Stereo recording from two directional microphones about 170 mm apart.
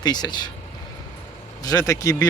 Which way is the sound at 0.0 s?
25° left (ahead or behind).